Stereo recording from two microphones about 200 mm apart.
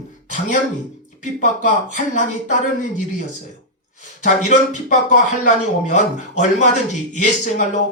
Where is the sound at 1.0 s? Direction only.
40° left (ahead or behind).